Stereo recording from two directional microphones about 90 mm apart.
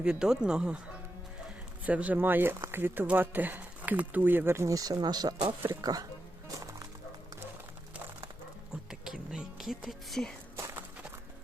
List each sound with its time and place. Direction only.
0.0 s speech: 10° right (ahead or behind)
1.8 s speech: 15° right (ahead or behind); by 5.3 s 50° right (ahead or behind)
5.4 s speech: 65° right (ahead or behind)
5.8 s speech: 45° right (ahead or behind)
8.9 s music: 5° right (ahead or behind)